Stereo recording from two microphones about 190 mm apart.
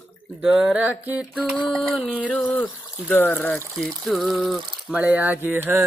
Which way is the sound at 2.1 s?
10° left (ahead or behind).